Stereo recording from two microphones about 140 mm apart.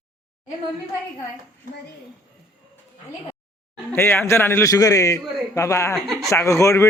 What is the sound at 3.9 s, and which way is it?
A man's voice, 15° left (ahead or behind).